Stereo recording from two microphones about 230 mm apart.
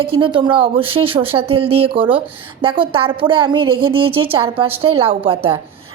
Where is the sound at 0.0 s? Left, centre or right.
Right.